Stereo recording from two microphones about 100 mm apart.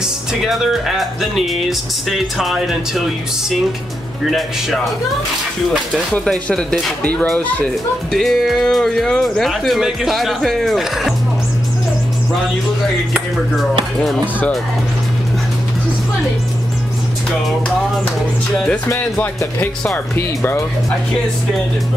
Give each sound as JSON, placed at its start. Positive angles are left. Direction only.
{"t": 0.3, "sound": "speech", "side_deg": 0}
{"t": 4.3, "sound": "speech", "side_deg": 0}
{"t": 6.1, "sound": "speech", "side_deg": 10}
{"t": 18.9, "sound": "speech", "side_deg": 20}